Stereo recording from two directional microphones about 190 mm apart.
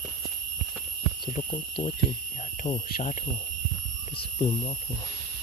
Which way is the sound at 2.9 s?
40° left (ahead or behind).